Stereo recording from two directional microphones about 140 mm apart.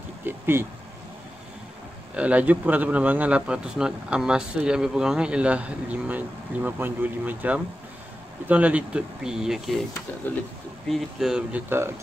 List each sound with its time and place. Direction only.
0.2 s speech: 15° right (ahead or behind)
2.1 s speech: 10° right (ahead or behind)
10.2 s speech: 15° left (ahead or behind)
10.9 s speech: centre (ahead or behind)